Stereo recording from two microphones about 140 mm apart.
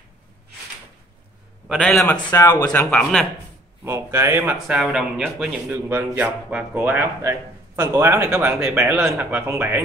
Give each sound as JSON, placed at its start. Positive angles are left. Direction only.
{"t": 1.8, "sound": "a man's voice", "side_deg": 5}
{"t": 2.1, "sound": "a man's voice", "side_deg": 25}
{"t": 2.9, "sound": "speech", "side_deg": 5}
{"t": 3.8, "sound": "a man's voice", "side_deg": -15}
{"t": 4.6, "sound": "a man's voice", "side_deg": 0}